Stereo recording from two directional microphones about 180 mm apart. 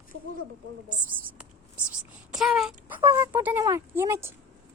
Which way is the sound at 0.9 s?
5° right (ahead or behind).